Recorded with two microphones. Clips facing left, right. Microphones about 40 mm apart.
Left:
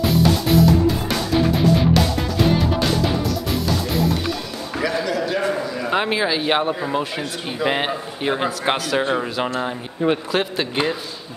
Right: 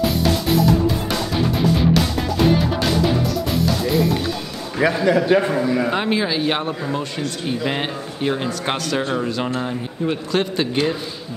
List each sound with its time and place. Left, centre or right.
0.0 s music: centre
5.0 s a man's voice: right
5.9 s speech: centre